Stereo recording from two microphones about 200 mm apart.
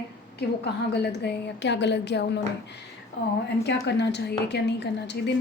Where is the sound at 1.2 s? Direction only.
60° left (ahead or behind).